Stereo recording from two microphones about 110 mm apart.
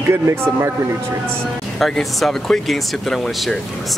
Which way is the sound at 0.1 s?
25° right (ahead or behind).